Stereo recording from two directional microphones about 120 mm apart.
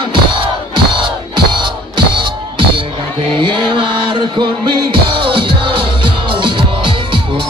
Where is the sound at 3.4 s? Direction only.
40° right (ahead or behind).